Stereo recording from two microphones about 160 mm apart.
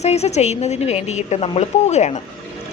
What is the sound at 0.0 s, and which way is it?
A woman's voice, 45° left (ahead or behind).